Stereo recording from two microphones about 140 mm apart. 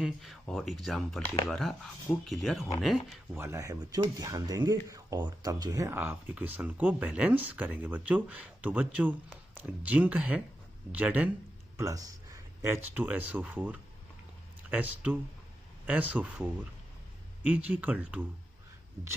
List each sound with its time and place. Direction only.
0.0 s speech: centre (ahead or behind)
3.3 s speech: 20° right (ahead or behind)
5.9 s speech: 10° right (ahead or behind)
11.7 s speech: 20° right (ahead or behind)